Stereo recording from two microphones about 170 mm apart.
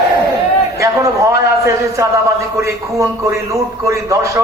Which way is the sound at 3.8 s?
20° right (ahead or behind).